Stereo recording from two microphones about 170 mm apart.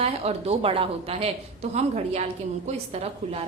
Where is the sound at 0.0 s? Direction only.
35° right (ahead or behind).